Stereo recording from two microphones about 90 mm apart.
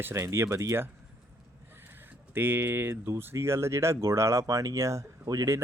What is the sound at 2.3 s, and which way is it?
Speech, 20° right (ahead or behind).